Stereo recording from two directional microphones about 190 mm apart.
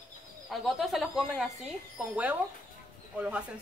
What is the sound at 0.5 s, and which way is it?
Speech, centre (ahead or behind).